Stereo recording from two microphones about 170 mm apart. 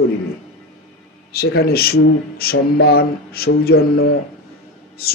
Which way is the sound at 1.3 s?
65° left (ahead or behind).